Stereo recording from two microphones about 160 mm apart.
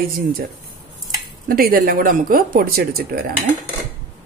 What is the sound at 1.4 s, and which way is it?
Speech, 65° right (ahead or behind).